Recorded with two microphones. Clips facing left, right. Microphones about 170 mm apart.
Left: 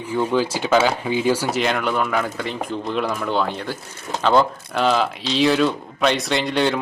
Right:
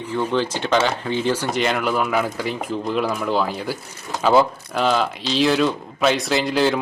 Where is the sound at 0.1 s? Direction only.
10° left (ahead or behind).